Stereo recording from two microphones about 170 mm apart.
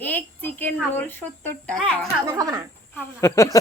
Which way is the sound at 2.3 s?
20° right (ahead or behind).